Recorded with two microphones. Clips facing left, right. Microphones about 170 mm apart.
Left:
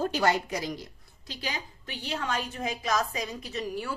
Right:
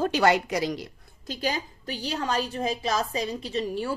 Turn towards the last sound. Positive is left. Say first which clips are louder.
# right 5 dB
turn(degrees=-30)  # may be behind; listen again after turning